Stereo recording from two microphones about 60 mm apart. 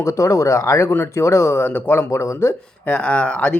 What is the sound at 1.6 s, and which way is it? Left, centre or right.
Speech, left.